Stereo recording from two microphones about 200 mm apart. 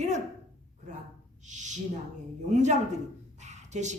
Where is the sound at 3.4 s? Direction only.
35° right (ahead or behind).